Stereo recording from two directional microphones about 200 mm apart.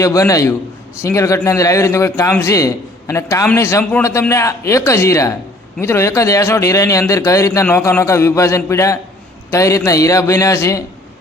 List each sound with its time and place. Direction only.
0.0 s a man's voice: 15° left (ahead or behind)